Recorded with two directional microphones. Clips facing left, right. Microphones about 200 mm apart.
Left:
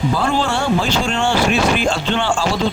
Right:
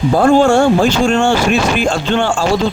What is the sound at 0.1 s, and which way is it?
A man's voice, 50° right (ahead or behind).